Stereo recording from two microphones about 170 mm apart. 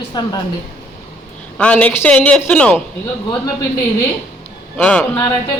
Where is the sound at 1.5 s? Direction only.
10° left (ahead or behind).